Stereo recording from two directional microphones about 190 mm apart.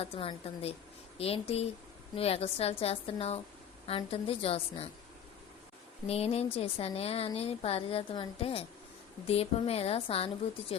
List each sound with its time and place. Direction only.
0.0 s a woman's voice: 30° left (ahead or behind)
6.1 s speech: 30° left (ahead or behind)